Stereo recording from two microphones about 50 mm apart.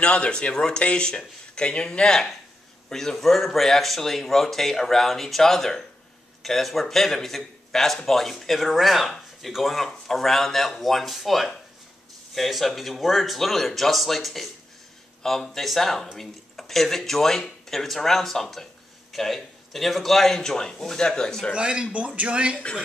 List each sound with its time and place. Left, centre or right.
0.0 s speech: centre
21.5 s speech: centre